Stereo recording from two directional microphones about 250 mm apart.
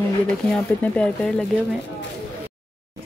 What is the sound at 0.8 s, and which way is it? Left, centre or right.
Speech, centre.